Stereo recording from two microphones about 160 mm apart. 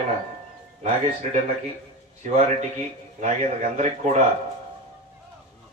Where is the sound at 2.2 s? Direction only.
45° right (ahead or behind).